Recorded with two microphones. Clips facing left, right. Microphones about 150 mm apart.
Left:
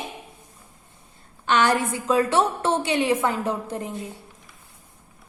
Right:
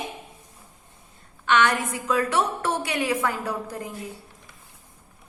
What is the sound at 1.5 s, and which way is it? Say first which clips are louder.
A woman's voice: left 1 dB; 35° left (ahead or behind).